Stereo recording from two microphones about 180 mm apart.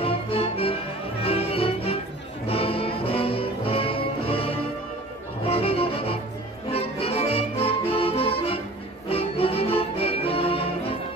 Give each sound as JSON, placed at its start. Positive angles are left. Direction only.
{"t": 0.0, "sound": "music", "side_deg": 30}